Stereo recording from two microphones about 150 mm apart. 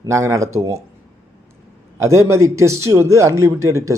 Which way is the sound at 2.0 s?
20° right (ahead or behind).